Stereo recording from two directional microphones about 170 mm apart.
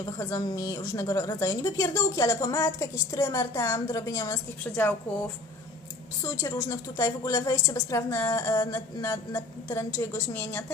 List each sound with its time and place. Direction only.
0.0 s a woman's voice: 20° left (ahead or behind)
6.2 s a woman's voice: 15° left (ahead or behind)